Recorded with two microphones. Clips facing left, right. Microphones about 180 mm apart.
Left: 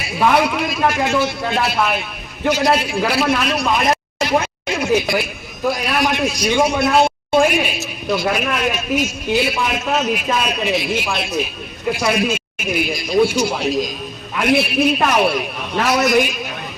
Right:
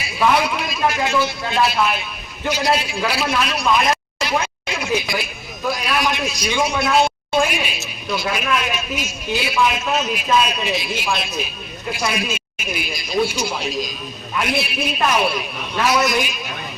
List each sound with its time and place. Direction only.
0.3 s a man's voice: 55° left (ahead or behind)